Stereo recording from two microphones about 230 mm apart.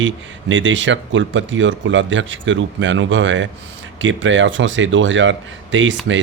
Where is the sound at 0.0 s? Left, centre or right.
Right.